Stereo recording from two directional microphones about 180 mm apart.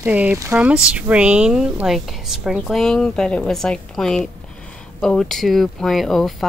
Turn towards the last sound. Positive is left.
turn(degrees=0)  # may be behind; listen again after turning